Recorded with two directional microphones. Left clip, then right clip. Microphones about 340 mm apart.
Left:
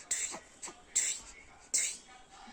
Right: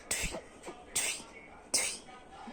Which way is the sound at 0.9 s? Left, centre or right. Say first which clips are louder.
Even; centre.